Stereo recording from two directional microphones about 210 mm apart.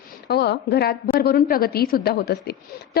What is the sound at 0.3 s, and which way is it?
A woman's voice, 50° left (ahead or behind).